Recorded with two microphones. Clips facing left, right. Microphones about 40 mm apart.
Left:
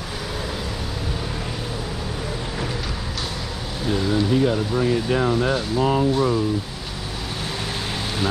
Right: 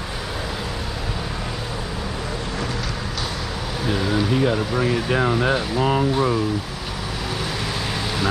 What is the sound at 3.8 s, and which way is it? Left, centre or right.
Speech, centre.